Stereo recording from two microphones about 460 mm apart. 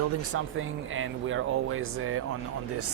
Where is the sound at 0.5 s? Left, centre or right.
Right.